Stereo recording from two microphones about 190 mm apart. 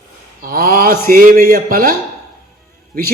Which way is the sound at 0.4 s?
50° right (ahead or behind).